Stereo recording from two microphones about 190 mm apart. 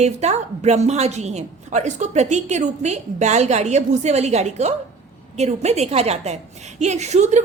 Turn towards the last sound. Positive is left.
turn(degrees=-35)  # may be behind; listen again after turning